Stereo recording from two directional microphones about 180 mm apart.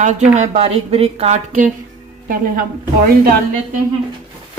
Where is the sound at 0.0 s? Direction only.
40° right (ahead or behind).